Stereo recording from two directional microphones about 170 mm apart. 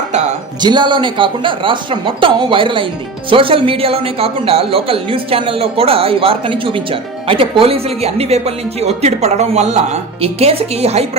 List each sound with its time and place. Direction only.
0.6 s speech: 25° right (ahead or behind)